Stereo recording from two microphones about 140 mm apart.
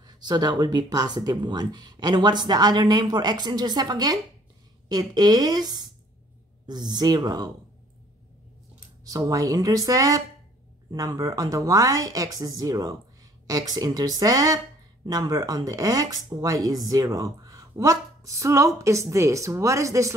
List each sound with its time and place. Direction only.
0.0 s speech: 30° right (ahead or behind)
9.0 s speech: 25° right (ahead or behind)